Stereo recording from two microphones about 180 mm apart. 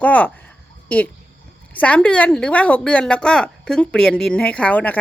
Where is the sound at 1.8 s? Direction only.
5° left (ahead or behind).